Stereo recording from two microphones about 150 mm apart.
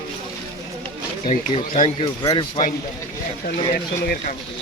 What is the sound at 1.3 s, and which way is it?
Speech, 50° left (ahead or behind).